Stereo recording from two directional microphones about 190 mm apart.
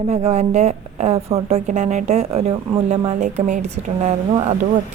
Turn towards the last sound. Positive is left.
turn(degrees=-35)  # may be behind; listen again after turning